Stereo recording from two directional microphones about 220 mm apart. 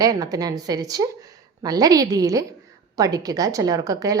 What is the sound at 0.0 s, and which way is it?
A woman's voice, 15° right (ahead or behind).